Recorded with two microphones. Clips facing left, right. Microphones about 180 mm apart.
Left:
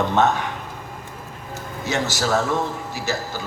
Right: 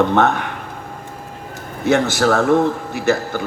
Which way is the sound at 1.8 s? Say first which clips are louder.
Right 8 dB; 55° right (ahead or behind).